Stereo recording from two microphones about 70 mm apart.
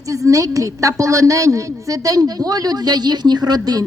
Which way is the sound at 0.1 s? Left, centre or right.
Right.